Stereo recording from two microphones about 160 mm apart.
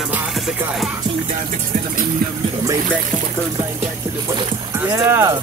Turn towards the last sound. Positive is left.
turn(degrees=-15)  # may be behind; listen again after turning